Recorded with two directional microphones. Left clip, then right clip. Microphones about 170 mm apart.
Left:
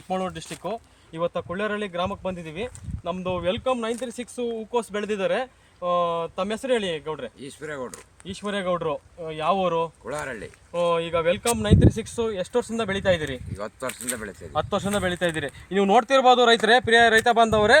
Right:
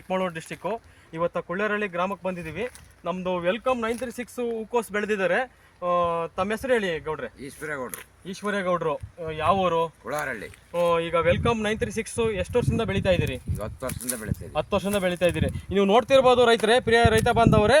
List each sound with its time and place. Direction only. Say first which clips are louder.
0.1 s speech: right 1 dB; 20° right (ahead or behind); by 7.9 s centre (ahead or behind)
8.4 s speech: right 1 dB; 15° right (ahead or behind); by 10.5 s 5° left (ahead or behind)
10.7 s speech: even; 10° right (ahead or behind)
12.3 s speech: even; 20° right (ahead or behind)
13.6 s speech: left 4 dB; centre (ahead or behind)
14.5 s speech: even; 30° right (ahead or behind)
17.2 s speech: left 2 dB; 25° right (ahead or behind)